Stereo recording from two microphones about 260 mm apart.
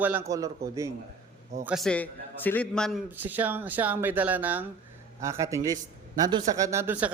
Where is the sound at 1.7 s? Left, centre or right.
Centre.